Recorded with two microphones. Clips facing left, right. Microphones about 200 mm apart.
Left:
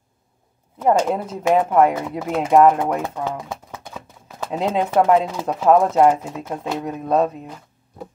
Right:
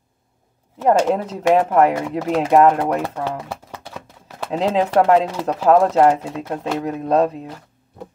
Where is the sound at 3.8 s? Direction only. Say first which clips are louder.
Right 1 dB; 75° right (ahead or behind).